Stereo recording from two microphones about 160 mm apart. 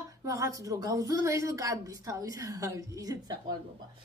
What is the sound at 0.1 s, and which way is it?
A woman's voice, 20° right (ahead or behind).